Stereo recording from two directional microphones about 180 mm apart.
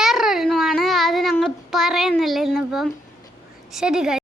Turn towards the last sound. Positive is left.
turn(degrees=-5)  # may be behind; listen again after turning